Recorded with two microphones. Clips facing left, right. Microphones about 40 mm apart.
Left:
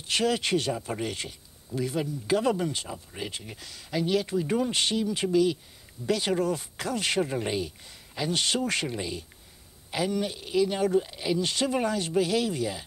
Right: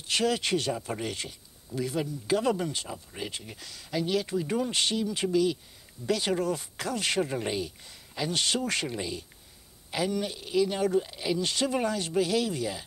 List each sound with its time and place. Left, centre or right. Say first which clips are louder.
0.0 s speech: left 1 dB; centre